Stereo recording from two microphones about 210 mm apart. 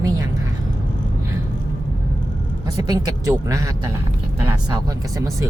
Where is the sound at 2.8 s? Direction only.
15° right (ahead or behind).